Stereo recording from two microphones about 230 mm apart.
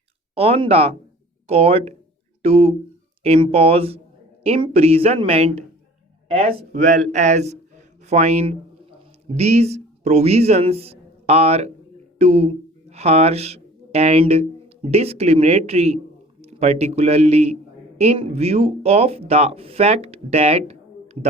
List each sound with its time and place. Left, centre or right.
0.3 s speech: right
6.6 s a man's voice: right